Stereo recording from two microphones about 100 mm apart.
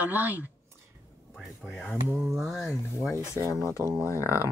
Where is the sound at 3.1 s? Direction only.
30° left (ahead or behind).